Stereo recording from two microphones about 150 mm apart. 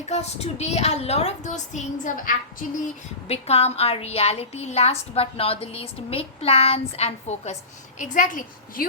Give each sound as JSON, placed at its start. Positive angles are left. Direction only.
{"t": 0.0, "sound": "a woman's voice", "side_deg": 45}
{"t": 3.2, "sound": "a woman's voice", "side_deg": 45}